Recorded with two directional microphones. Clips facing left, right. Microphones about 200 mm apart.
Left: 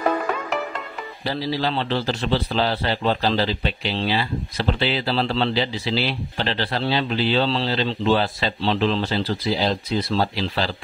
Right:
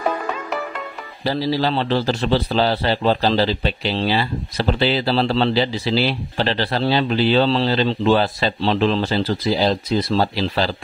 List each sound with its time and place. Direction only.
1.2 s a man's voice: 35° right (ahead or behind)